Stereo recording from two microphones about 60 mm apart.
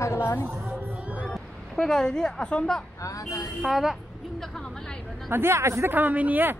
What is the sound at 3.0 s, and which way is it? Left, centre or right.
Speech, left.